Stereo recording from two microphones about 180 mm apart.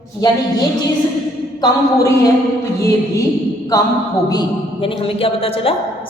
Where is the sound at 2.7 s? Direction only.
15° left (ahead or behind).